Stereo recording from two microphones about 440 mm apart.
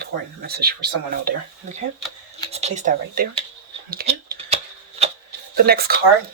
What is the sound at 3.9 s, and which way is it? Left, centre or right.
Shuffling cards, centre.